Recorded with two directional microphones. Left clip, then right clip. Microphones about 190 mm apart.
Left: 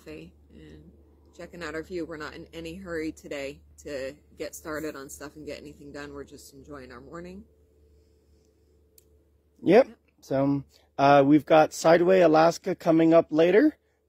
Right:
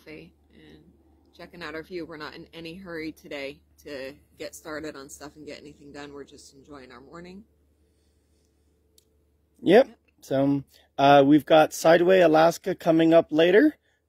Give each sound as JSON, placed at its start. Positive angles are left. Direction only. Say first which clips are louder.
{"t": 0.0, "sound": "a sound", "louder": "left 1 dB", "side_deg": 15}
{"t": 1.3, "sound": "speech", "louder": "left 1 dB", "side_deg": 5}
{"t": 9.6, "sound": "speech", "louder": "right 1 dB", "side_deg": -25}